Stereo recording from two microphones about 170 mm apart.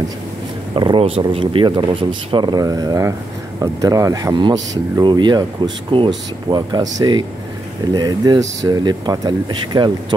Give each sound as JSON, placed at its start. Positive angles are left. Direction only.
{"t": 0.7, "sound": "speech", "side_deg": -30}